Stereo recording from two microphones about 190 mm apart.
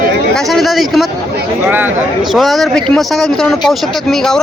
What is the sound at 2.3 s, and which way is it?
Speech, centre (ahead or behind).